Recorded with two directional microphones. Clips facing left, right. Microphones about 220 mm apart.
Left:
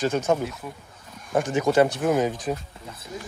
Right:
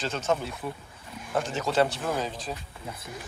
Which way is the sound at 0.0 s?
15° left (ahead or behind).